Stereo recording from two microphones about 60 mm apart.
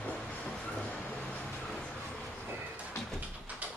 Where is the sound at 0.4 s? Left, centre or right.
Centre.